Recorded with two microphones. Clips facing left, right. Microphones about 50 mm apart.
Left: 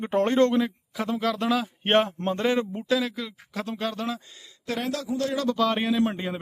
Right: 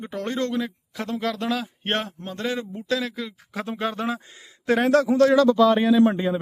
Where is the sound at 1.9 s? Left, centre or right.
Left.